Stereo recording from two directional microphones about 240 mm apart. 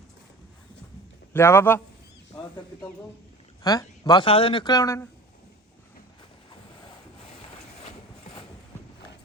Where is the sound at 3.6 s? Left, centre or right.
Centre.